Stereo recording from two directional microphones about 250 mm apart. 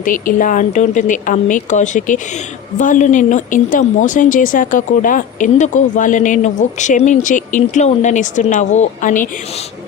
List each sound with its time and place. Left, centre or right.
0.0 s speech: left